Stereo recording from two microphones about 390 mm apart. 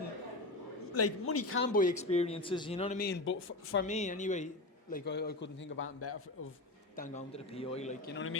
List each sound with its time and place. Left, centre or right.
0.9 s speech: left
3.8 s a man's voice: centre; by 6.2 s left
6.9 s a man's voice: centre